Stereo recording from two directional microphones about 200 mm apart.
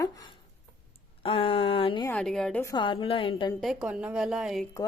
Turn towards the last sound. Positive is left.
turn(degrees=0)  # may be behind; listen again after turning